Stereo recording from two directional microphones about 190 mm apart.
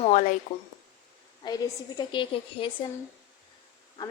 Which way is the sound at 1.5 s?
20° left (ahead or behind).